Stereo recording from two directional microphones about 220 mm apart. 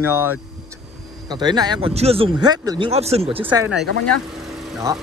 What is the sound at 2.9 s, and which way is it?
Speech, 30° right (ahead or behind).